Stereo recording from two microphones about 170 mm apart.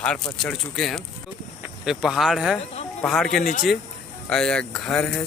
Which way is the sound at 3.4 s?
60° left (ahead or behind).